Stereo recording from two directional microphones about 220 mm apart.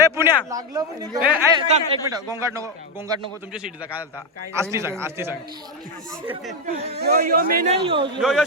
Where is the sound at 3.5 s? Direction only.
5° right (ahead or behind).